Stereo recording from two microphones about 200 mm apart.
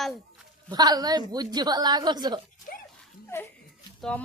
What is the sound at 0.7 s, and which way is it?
Speech, 20° right (ahead or behind).